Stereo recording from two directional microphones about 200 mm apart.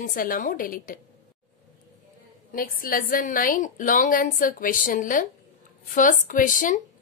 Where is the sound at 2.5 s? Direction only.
45° left (ahead or behind).